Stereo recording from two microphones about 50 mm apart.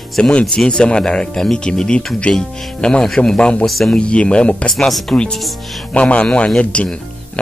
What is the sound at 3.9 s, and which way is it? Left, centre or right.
Speech, left.